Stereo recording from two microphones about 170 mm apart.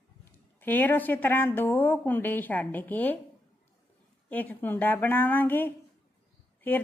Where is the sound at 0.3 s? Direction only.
10° left (ahead or behind).